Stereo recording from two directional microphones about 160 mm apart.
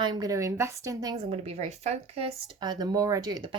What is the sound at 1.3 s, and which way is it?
Speech, 40° right (ahead or behind).